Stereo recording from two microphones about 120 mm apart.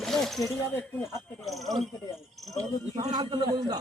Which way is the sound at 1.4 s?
Centre (ahead or behind).